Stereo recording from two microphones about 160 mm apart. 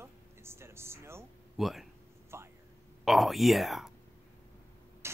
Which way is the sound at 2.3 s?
15° right (ahead or behind).